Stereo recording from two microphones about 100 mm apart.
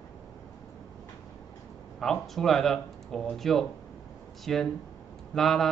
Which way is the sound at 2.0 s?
5° left (ahead or behind).